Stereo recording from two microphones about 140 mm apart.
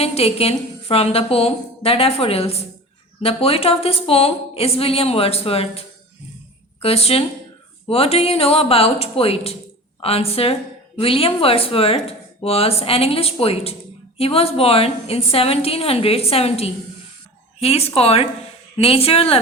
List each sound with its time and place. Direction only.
0.0 s speech: 45° left (ahead or behind)
6.8 s speech: 45° left (ahead or behind)